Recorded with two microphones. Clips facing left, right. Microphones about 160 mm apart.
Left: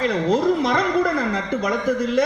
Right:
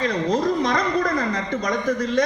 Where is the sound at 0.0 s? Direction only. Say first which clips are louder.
Left 2 dB; 5° left (ahead or behind).